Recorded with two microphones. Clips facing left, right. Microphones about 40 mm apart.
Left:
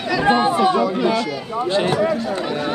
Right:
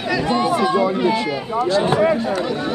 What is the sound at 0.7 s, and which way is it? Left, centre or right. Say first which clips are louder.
Speech: right 1 dB; right.